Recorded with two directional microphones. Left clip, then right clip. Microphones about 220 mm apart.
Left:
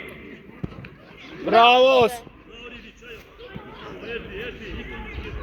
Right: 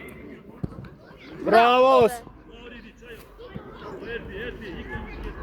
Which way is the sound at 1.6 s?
45° right (ahead or behind).